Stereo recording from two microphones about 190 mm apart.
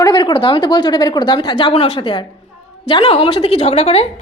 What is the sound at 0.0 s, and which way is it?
A woman's voice, 25° left (ahead or behind).